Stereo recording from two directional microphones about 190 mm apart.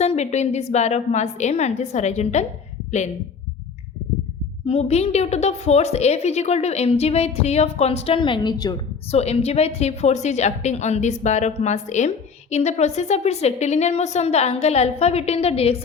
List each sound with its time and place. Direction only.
0.0 s a woman's voice: 35° left (ahead or behind)
4.6 s a woman's voice: 35° left (ahead or behind)
9.1 s a woman's voice: 35° left (ahead or behind)